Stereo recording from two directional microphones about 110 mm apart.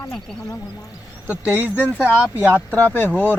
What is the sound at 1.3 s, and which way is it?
Speech, 15° right (ahead or behind).